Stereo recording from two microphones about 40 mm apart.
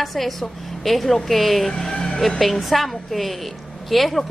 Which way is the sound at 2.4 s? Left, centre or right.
Centre.